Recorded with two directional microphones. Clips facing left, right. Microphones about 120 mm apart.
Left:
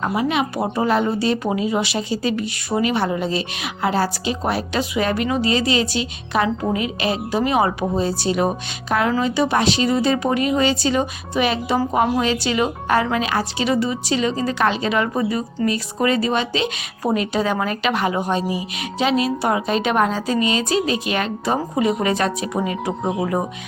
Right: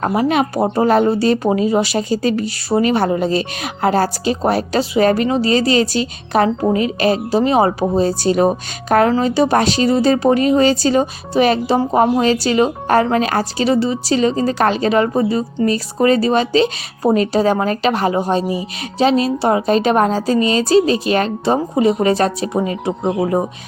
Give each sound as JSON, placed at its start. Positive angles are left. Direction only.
{"t": 0.1, "sound": "a woman's voice", "side_deg": -45}
{"t": 11.8, "sound": "a woman's voice", "side_deg": -25}